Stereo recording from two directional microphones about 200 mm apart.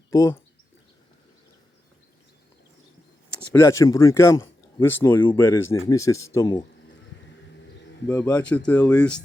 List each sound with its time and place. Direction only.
0.1 s speech: 15° left (ahead or behind)
3.5 s speech: 15° left (ahead or behind)
8.0 s speech: 15° left (ahead or behind)